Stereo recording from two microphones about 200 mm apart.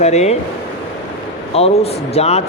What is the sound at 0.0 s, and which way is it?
Speech, 35° left (ahead or behind).